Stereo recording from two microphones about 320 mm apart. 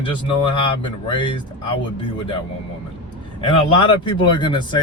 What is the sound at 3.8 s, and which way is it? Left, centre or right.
Speech, centre.